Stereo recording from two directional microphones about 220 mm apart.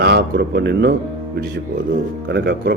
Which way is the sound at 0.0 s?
50° right (ahead or behind).